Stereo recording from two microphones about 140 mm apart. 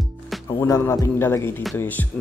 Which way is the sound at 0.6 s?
20° left (ahead or behind).